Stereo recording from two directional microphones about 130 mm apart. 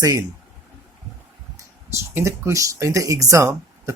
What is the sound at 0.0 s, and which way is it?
Speech, 25° right (ahead or behind).